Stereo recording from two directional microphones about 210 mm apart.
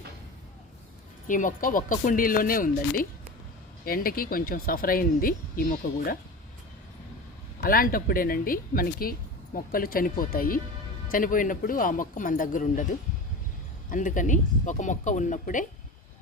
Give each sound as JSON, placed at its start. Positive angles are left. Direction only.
{"t": 1.3, "sound": "a woman's voice", "side_deg": 40}
{"t": 7.6, "sound": "a woman's voice", "side_deg": 45}